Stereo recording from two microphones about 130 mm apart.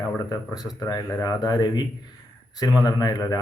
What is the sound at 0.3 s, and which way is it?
Speech, 30° left (ahead or behind).